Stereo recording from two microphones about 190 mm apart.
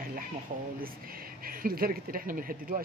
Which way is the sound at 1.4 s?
50° right (ahead or behind).